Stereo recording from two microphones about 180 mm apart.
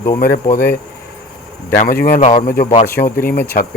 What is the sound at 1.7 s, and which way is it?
Speech, 50° left (ahead or behind).